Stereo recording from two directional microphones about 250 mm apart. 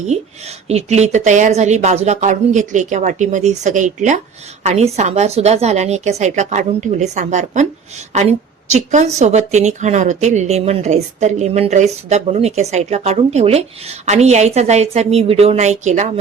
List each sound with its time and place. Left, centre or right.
0.1 s a woman's voice: right